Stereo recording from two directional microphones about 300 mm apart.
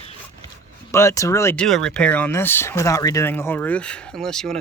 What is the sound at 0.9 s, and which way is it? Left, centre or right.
Speech, centre.